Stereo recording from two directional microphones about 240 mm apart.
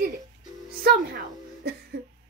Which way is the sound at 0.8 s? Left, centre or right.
Right.